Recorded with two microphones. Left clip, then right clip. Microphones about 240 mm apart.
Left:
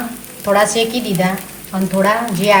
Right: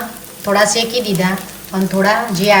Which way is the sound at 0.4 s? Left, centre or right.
Centre.